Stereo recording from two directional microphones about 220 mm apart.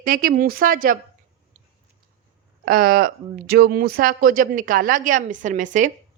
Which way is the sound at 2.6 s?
40° right (ahead or behind).